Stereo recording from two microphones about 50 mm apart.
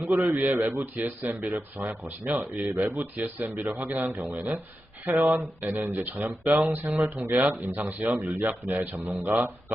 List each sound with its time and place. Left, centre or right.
0.0 s speech: right